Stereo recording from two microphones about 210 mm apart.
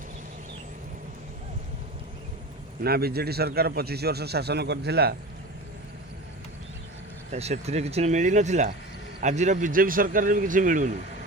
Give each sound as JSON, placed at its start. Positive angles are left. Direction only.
{"t": 2.8, "sound": "speech", "side_deg": -50}
{"t": 7.3, "sound": "a man's voice", "side_deg": -30}